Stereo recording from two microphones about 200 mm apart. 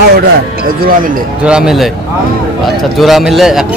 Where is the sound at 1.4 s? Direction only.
5° right (ahead or behind).